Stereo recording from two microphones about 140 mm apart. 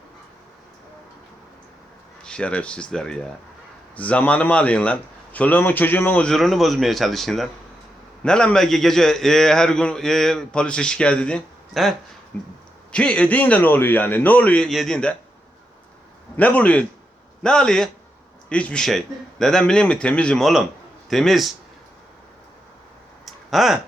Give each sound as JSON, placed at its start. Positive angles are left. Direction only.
{"t": 2.2, "sound": "a man's voice", "side_deg": 10}
{"t": 12.3, "sound": "a man's voice", "side_deg": 10}
{"t": 16.4, "sound": "a man's voice", "side_deg": 10}
{"t": 23.2, "sound": "a sound", "side_deg": 0}